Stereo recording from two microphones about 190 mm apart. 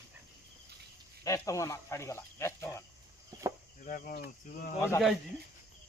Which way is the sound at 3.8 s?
45° left (ahead or behind).